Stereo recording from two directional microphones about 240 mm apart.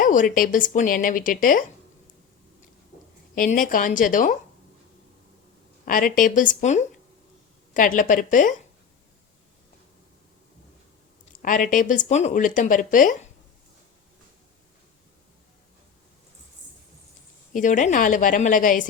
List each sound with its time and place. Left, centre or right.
0.0 s speech: left
3.3 s speech: left
5.8 s speech: left
11.4 s speech: left
17.5 s speech: left